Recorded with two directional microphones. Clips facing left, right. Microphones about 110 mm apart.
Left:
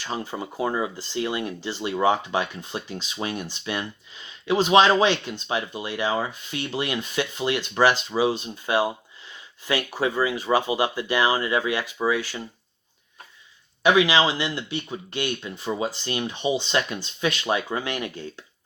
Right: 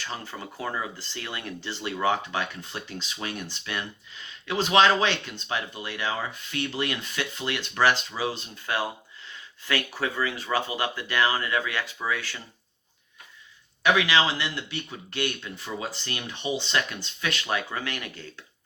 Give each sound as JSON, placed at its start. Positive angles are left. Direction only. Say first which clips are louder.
{"t": 0.0, "sound": "speech", "louder": "left 6 dB", "side_deg": 15}
{"t": 13.8, "sound": "speech", "louder": "left 4 dB", "side_deg": 15}